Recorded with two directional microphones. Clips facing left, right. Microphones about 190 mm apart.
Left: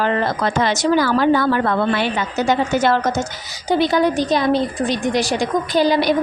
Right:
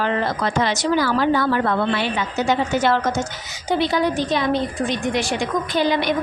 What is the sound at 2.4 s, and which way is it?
A woman's voice, 40° left (ahead or behind).